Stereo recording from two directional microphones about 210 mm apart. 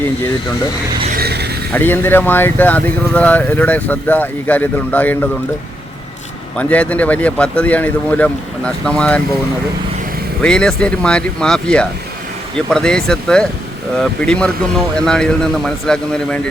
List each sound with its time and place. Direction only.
1.1 s vehicle: 50° right (ahead or behind)
1.7 s speech: 10° left (ahead or behind)
6.6 s speech: 5° left (ahead or behind)
10.4 s speech: 5° left (ahead or behind)